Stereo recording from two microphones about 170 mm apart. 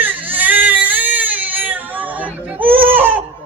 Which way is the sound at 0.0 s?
10° right (ahead or behind).